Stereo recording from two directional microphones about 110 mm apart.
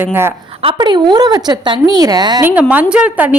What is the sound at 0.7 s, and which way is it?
A woman's voice, 45° right (ahead or behind).